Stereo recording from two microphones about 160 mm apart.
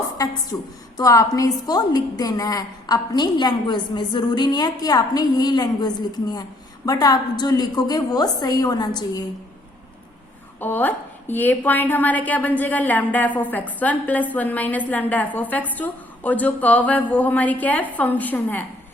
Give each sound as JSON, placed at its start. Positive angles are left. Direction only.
{"t": 0.5, "sound": "a woman's voice", "side_deg": 15}
{"t": 10.6, "sound": "a woman's voice", "side_deg": 10}